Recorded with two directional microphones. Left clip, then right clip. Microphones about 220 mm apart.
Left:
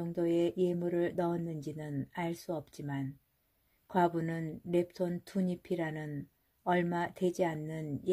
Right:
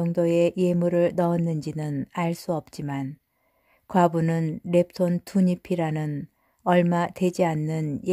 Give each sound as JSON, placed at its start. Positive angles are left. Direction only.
{"t": 0.0, "sound": "speech", "side_deg": -30}